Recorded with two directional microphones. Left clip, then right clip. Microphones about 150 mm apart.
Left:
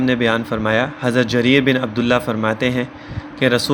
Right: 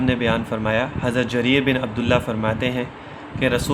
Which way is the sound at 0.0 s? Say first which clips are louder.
Left 4 dB; 30° left (ahead or behind).